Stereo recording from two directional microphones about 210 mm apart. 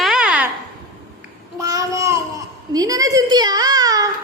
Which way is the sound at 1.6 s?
15° right (ahead or behind).